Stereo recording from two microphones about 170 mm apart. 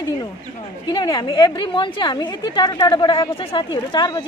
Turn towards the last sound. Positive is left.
turn(degrees=25)  # may be behind; listen again after turning